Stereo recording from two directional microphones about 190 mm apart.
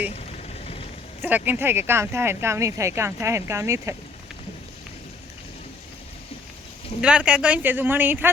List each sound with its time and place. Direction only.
0.1 s vehicle: 30° left (ahead or behind)
1.2 s speech: 10° right (ahead or behind)
7.0 s speech: 5° right (ahead or behind)